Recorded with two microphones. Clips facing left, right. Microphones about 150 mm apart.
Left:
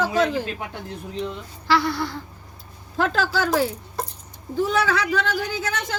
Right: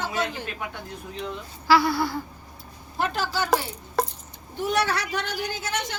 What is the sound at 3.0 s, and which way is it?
Speech, 90° left.